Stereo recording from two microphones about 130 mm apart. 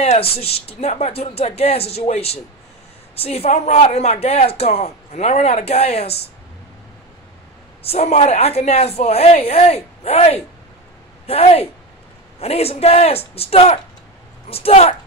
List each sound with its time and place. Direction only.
0.0 s speech: 50° left (ahead or behind)
7.8 s speech: 50° left (ahead or behind)